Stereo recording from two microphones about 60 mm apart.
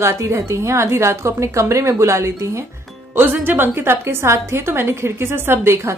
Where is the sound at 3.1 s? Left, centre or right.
Right.